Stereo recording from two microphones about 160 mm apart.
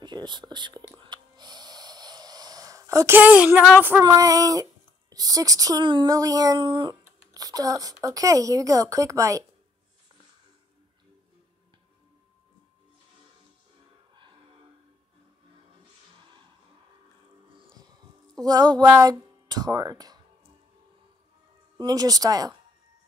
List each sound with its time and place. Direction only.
0.0 s speech: 25° right (ahead or behind)
0.9 s snort: 30° right (ahead or behind); by 3.6 s 10° right (ahead or behind)
4.0 s speech: 20° right (ahead or behind)
18.4 s a sound: 25° right (ahead or behind)
18.9 s speech: 25° right (ahead or behind)
21.7 s speech: 25° right (ahead or behind)